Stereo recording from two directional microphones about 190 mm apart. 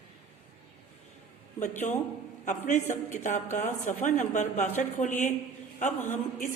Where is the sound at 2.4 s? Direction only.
40° left (ahead or behind).